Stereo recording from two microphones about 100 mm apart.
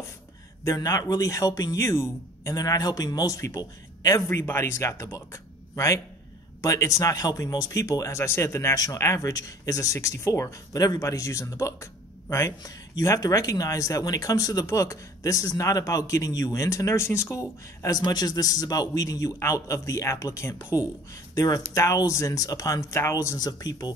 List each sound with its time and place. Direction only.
0.7 s speech: 35° left (ahead or behind)